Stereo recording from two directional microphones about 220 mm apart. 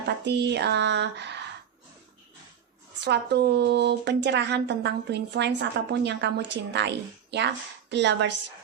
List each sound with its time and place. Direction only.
0.3 s speech: 50° right (ahead or behind)
3.0 s speech: 50° right (ahead or behind)